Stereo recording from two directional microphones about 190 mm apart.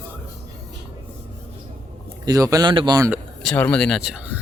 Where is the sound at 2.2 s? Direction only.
20° right (ahead or behind).